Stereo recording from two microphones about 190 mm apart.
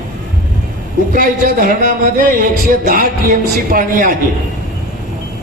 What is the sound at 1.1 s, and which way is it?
A man's voice, 45° right (ahead or behind).